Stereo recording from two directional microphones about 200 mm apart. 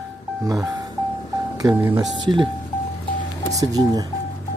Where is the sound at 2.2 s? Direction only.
20° right (ahead or behind).